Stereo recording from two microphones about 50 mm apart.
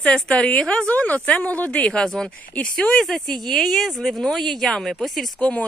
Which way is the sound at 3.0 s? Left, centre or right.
Centre.